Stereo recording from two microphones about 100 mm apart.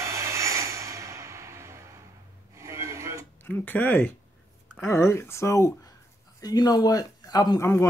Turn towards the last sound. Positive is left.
turn(degrees=25)  # may be behind; listen again after turning